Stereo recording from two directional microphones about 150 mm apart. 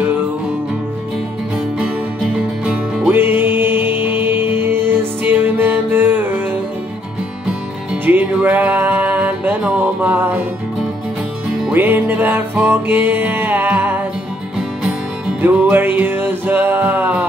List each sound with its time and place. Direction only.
2.3 s music: 10° right (ahead or behind)
7.4 s music: 10° right (ahead or behind)
11.7 s music: 10° right (ahead or behind)
15.4 s music: 15° right (ahead or behind)